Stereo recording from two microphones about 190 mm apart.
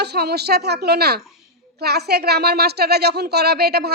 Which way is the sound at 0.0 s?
60° right (ahead or behind).